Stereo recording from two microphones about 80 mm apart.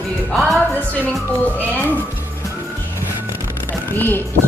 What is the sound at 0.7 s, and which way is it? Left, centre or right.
Speech, centre.